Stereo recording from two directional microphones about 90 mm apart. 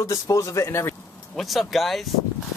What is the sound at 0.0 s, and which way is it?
Speech, 35° left (ahead or behind).